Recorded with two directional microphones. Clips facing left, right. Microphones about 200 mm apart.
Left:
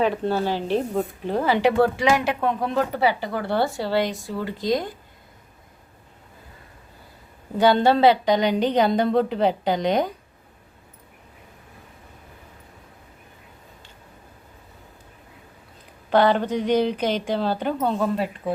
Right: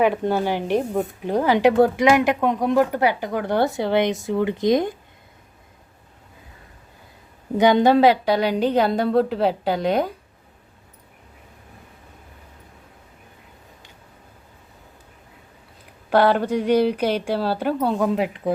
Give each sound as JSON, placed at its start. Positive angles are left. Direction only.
{"t": 0.0, "sound": "speech", "side_deg": -15}
{"t": 7.6, "sound": "a woman's voice", "side_deg": -15}
{"t": 16.0, "sound": "speech", "side_deg": -10}